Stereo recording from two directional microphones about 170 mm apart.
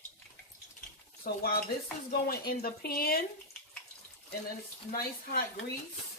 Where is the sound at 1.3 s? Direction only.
65° left (ahead or behind).